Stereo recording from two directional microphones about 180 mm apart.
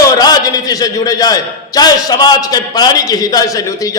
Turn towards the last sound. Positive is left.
turn(degrees=20)  # may be behind; listen again after turning